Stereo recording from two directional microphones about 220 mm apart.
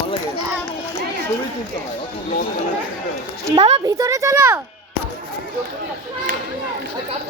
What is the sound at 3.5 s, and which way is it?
Speech, 25° right (ahead or behind).